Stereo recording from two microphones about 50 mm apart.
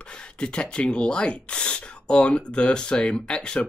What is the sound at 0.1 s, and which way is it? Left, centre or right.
Speech, left.